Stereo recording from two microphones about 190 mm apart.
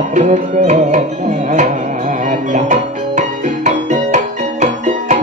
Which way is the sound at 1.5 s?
40° right (ahead or behind).